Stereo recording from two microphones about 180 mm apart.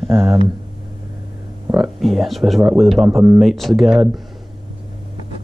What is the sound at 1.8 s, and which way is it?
Speech, centre (ahead or behind).